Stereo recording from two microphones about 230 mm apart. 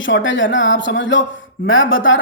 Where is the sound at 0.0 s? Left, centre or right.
Left.